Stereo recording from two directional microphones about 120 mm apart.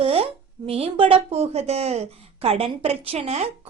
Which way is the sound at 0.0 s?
55° right (ahead or behind).